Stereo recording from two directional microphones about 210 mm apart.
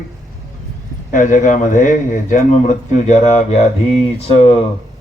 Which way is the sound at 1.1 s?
40° left (ahead or behind).